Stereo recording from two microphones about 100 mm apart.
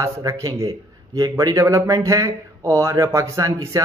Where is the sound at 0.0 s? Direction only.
35° right (ahead or behind).